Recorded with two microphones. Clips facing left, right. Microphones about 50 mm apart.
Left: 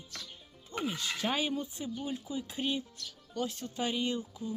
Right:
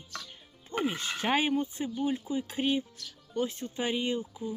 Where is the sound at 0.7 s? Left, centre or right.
Right.